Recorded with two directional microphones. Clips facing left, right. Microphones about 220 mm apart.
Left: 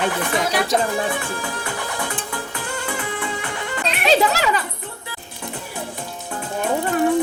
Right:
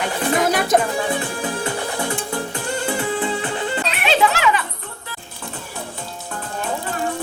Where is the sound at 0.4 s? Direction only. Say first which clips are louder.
Right 4 dB; 50° right (ahead or behind).